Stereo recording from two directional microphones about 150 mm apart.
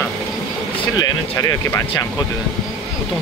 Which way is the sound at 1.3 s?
25° left (ahead or behind).